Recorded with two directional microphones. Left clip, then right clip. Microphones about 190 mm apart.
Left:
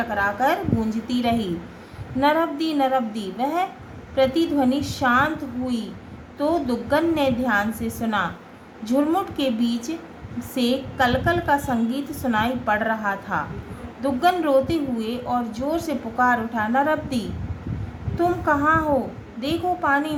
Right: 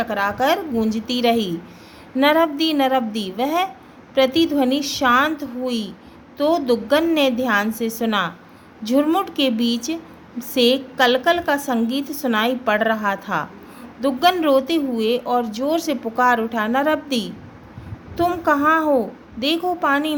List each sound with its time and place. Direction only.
0.0 s speech: 55° right (ahead or behind)